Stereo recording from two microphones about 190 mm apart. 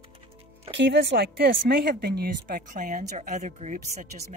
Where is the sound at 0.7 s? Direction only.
70° right (ahead or behind); by 4.3 s 40° right (ahead or behind).